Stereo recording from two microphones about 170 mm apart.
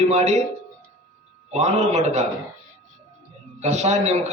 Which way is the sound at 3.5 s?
40° right (ahead or behind).